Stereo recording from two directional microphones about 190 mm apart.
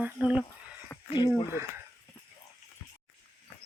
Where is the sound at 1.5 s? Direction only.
10° right (ahead or behind).